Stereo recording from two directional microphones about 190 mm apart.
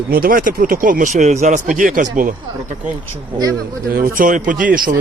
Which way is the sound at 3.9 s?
45° right (ahead or behind).